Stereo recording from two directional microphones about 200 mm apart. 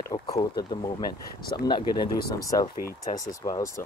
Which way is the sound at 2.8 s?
45° left (ahead or behind).